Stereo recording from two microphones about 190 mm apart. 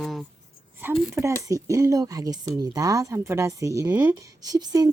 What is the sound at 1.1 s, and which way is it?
Speech, 15° right (ahead or behind).